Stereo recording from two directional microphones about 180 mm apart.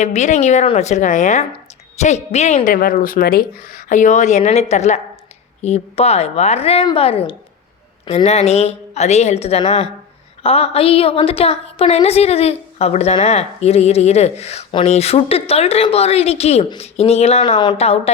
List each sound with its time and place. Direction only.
0.0 s a woman's voice: 40° left (ahead or behind)